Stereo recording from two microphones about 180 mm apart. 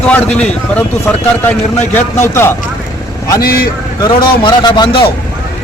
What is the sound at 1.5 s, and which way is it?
Speech, 10° left (ahead or behind).